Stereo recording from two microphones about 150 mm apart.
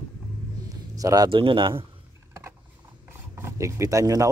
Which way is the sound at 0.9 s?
25° right (ahead or behind).